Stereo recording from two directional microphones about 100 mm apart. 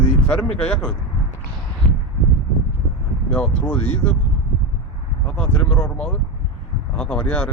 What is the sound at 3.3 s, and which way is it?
Speech, 15° left (ahead or behind).